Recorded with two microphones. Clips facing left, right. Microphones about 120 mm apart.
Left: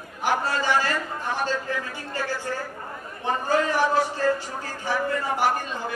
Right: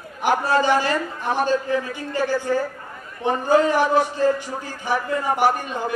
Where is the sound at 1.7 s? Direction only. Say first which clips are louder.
Right 7 dB; 20° right (ahead or behind).